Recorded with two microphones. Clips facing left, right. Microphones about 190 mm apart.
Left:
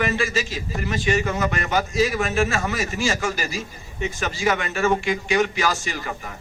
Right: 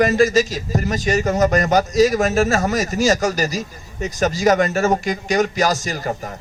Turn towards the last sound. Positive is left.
turn(degrees=-40)  # may be behind; listen again after turning